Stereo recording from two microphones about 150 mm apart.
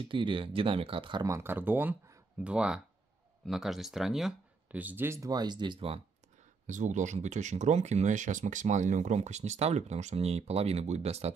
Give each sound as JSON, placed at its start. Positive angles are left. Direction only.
{"t": 0.0, "sound": "speech", "side_deg": -35}
{"t": 1.2, "sound": "speech", "side_deg": -20}
{"t": 6.7, "sound": "speech", "side_deg": -55}